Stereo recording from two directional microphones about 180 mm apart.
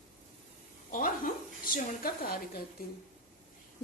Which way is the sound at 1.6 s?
55° left (ahead or behind).